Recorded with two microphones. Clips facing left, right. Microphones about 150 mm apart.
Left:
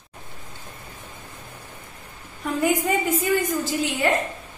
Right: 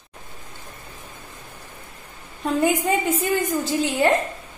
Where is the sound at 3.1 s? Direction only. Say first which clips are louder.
Even; 30° right (ahead or behind).